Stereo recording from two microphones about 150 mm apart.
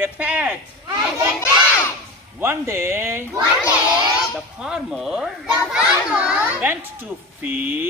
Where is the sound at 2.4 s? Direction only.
15° right (ahead or behind).